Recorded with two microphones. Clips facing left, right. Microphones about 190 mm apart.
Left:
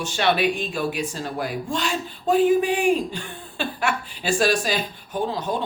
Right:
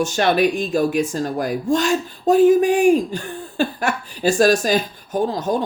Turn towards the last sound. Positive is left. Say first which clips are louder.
# right 5 dB
turn(degrees=-45)  # may be behind; listen again after turning